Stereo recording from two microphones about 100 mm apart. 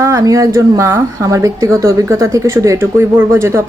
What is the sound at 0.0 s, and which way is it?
A woman's voice, 30° right (ahead or behind).